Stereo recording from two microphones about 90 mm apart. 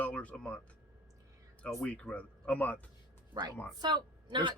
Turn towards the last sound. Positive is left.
turn(degrees=-55)  # may be behind; listen again after turning